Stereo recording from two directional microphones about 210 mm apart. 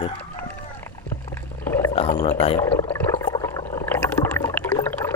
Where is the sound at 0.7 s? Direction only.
10° left (ahead or behind).